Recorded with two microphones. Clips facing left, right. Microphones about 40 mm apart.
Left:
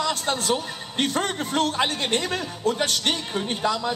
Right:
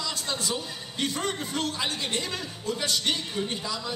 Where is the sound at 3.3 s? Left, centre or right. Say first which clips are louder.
Left 3 dB; left.